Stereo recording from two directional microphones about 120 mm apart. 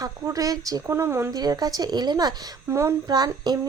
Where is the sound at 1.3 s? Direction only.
30° right (ahead or behind).